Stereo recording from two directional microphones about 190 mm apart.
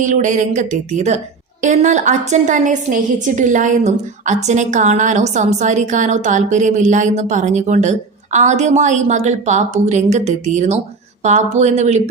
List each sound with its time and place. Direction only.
0.0 s a woman's voice: 40° right (ahead or behind)